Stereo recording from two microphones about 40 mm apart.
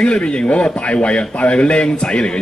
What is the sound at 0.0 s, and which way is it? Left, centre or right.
A man's voice, left.